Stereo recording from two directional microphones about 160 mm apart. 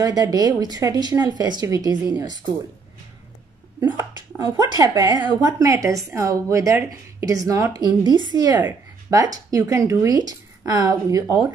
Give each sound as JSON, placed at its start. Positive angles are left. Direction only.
{"t": 0.0, "sound": "speech", "side_deg": -25}
{"t": 4.6, "sound": "speech", "side_deg": -20}